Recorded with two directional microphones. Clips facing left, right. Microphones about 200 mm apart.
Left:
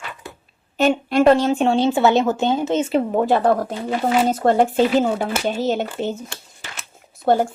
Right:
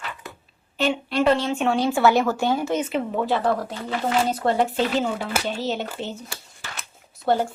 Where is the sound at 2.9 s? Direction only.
40° left (ahead or behind).